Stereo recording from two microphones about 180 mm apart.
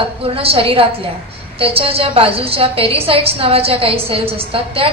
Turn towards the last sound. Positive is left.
turn(degrees=-30)  # may be behind; listen again after turning